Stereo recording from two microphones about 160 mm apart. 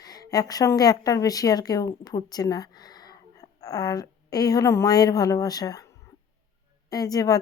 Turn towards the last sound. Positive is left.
turn(degrees=20)  # may be behind; listen again after turning